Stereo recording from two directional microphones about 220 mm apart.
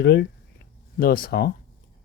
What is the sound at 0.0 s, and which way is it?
Speech, 50° left (ahead or behind).